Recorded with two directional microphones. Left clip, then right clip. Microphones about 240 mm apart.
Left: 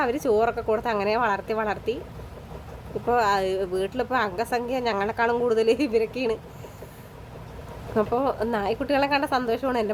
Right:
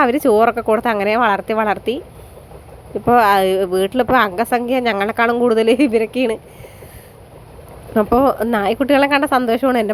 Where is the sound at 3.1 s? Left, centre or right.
Right.